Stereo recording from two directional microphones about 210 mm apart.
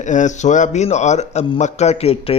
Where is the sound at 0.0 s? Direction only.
35° left (ahead or behind).